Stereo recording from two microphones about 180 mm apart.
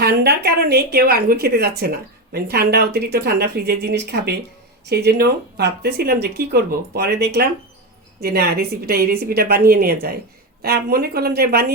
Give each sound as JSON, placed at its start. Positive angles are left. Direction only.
{"t": 0.0, "sound": "a woman's voice", "side_deg": -60}